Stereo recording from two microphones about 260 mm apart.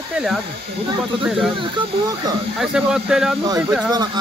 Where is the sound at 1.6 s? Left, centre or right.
Centre.